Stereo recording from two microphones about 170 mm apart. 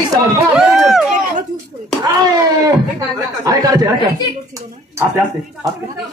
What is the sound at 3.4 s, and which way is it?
Speech, 20° right (ahead or behind).